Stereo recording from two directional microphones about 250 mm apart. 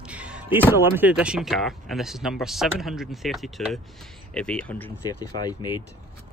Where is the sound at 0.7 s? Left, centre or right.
Centre.